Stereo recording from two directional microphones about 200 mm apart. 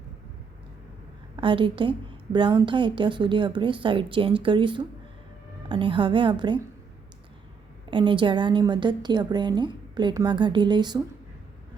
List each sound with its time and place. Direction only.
1.4 s a woman's voice: 25° right (ahead or behind)
7.9 s a woman's voice: 25° right (ahead or behind)